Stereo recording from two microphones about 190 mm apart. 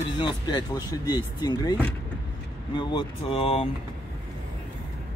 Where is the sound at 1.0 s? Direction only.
20° left (ahead or behind).